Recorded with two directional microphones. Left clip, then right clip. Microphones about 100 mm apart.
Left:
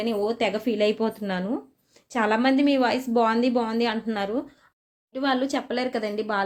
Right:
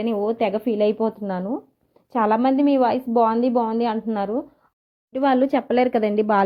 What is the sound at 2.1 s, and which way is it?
A woman's voice, 55° right (ahead or behind).